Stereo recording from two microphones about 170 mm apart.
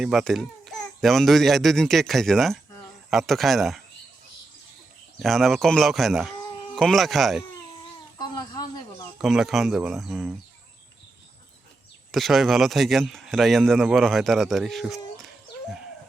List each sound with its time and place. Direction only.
0.0 s speech: centre (ahead or behind)
5.2 s speech: centre (ahead or behind)
9.2 s speech: centre (ahead or behind)
12.1 s speech: centre (ahead or behind)